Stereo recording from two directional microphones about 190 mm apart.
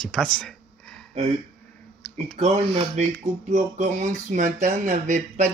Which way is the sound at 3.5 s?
40° right (ahead or behind).